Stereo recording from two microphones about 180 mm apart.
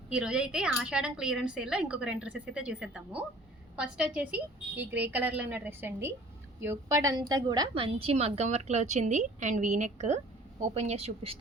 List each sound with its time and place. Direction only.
0.1 s a woman's voice: 5° right (ahead or behind); by 11.3 s 35° right (ahead or behind)